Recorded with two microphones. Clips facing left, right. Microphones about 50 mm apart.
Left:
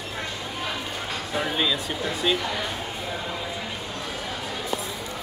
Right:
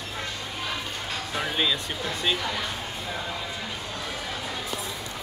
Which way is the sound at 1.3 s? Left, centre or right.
Centre.